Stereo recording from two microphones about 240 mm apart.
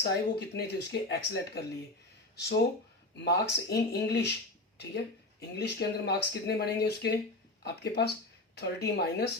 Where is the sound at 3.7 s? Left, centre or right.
Left.